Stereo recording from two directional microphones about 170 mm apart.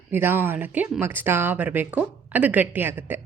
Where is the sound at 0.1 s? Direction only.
10° right (ahead or behind).